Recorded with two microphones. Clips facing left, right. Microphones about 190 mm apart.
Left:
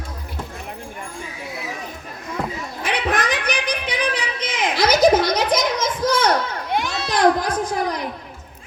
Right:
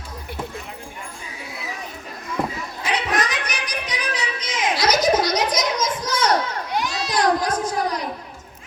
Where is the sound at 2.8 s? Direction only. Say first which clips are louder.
Left 2 dB; 55° left (ahead or behind).